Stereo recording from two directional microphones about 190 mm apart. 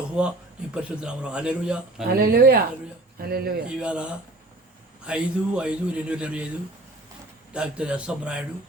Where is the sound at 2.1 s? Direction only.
55° right (ahead or behind).